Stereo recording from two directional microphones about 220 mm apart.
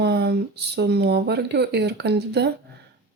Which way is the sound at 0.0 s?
50° right (ahead or behind).